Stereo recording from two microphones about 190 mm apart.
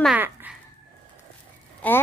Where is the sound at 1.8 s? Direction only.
10° left (ahead or behind).